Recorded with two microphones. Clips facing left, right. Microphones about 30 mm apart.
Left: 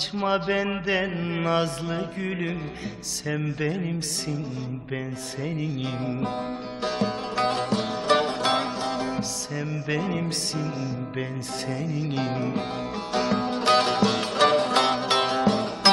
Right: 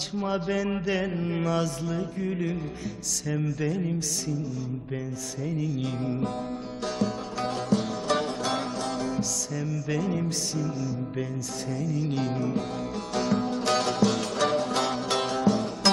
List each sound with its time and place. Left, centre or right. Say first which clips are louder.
0.2 s mantra: left 4 dB; left
5.5 s music: right 1 dB; left
7.3 s music: left 3 dB; left
8.8 s music: left 2 dB; left
9.9 s mantra: left 1 dB; left
11.8 s mantra: right 2 dB; left
13.1 s music: left 2 dB; left